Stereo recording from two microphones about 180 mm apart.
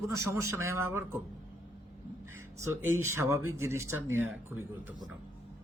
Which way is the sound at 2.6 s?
15° right (ahead or behind).